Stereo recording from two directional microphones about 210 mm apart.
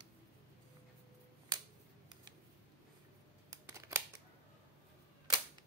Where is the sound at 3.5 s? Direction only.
15° right (ahead or behind).